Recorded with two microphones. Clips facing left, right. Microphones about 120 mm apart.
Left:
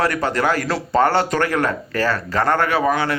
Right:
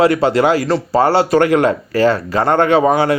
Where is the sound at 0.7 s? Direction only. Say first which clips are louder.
Right 4 dB; centre (ahead or behind).